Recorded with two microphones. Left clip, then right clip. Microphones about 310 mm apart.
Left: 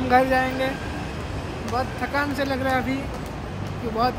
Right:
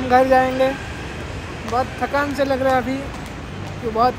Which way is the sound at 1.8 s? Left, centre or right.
Centre.